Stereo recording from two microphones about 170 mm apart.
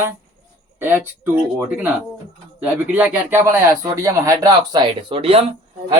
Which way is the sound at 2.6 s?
10° right (ahead or behind).